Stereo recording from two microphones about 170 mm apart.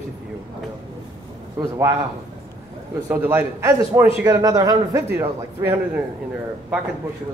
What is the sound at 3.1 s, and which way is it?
A man's voice, 10° right (ahead or behind).